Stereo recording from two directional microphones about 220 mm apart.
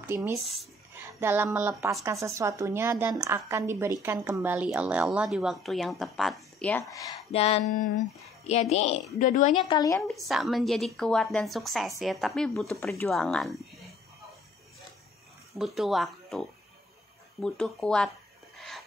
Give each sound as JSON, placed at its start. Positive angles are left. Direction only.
{"t": 0.0, "sound": "speech", "side_deg": -10}
{"t": 0.4, "sound": "a woman's voice", "side_deg": 0}
{"t": 7.3, "sound": "a sound", "side_deg": 30}
{"t": 8.5, "sound": "a woman's voice", "side_deg": 30}
{"t": 9.6, "sound": "a woman's voice", "side_deg": 20}
{"t": 10.0, "sound": "a woman's voice", "side_deg": 0}
{"t": 15.5, "sound": "a woman's voice", "side_deg": 0}
{"t": 18.6, "sound": "a sound", "side_deg": 0}